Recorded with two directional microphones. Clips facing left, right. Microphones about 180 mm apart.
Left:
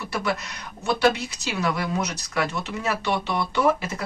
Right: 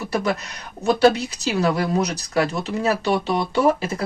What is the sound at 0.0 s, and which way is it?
Speech, 35° right (ahead or behind).